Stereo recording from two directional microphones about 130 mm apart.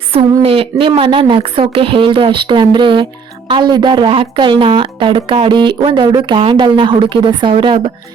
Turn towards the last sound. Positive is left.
turn(degrees=-45)  # may be behind; listen again after turning